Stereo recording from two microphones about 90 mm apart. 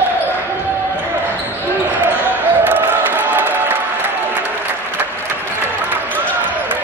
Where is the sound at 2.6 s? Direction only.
20° right (ahead or behind).